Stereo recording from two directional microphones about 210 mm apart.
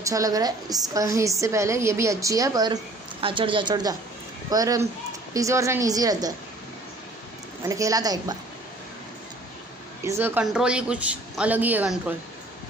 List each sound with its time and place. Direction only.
0.0 s a woman's voice: 15° right (ahead or behind)
7.6 s a woman's voice: 15° right (ahead or behind)
10.0 s a woman's voice: 10° right (ahead or behind)